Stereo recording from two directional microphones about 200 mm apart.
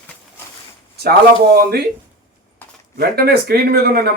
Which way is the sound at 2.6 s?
10° left (ahead or behind).